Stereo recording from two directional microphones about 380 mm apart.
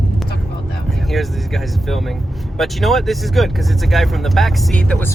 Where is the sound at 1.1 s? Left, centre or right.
Centre.